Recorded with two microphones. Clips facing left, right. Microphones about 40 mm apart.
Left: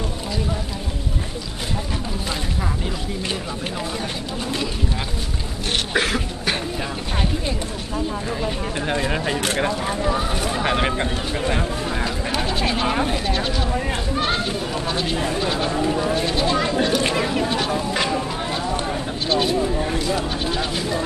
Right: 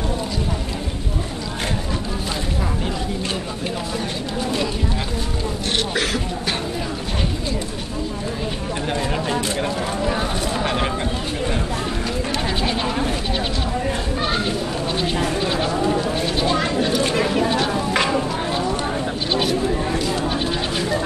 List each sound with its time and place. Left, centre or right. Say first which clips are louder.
5.9 s speech: left 1 dB; left
8.9 s speech: even; centre
10.6 s speech: left 3 dB; centre
15.0 s speech: right 2 dB; centre